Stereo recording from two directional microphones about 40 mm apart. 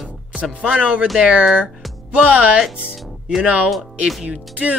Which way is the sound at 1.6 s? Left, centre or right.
Right.